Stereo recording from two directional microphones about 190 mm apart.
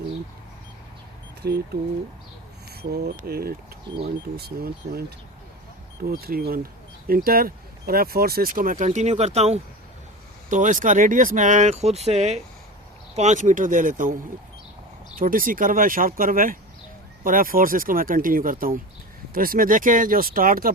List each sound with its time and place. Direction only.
1.4 s speech: 60° right (ahead or behind)
2.9 s speech: 55° right (ahead or behind)